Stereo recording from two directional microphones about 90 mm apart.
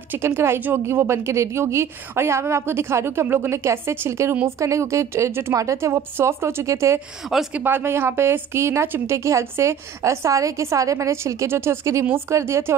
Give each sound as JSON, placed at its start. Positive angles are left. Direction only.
{"t": 0.1, "sound": "a woman's voice", "side_deg": -25}
{"t": 7.5, "sound": "a woman's voice", "side_deg": -20}